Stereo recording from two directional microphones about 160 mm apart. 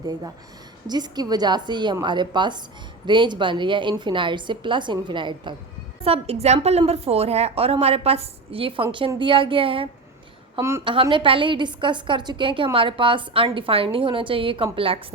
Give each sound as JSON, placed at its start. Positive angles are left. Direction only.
{"t": 0.9, "sound": "a woman's voice", "side_deg": -25}
{"t": 6.1, "sound": "a woman's voice", "side_deg": -40}
{"t": 10.6, "sound": "a woman's voice", "side_deg": -15}
{"t": 10.8, "sound": "a woman's voice", "side_deg": -30}